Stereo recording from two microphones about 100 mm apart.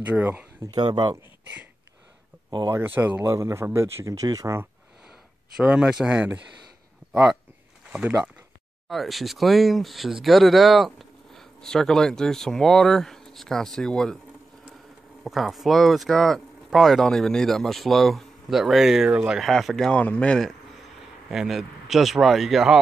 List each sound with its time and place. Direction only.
0.0 s speech: 15° right (ahead or behind)
0.7 s speech: 50° right (ahead or behind)
2.8 s speech: 20° right (ahead or behind); by 4.6 s 35° right (ahead or behind)
5.6 s speech: 10° right (ahead or behind)
8.8 s speech: centre (ahead or behind)
15.2 s speech: centre (ahead or behind)
21.3 s speech: centre (ahead or behind)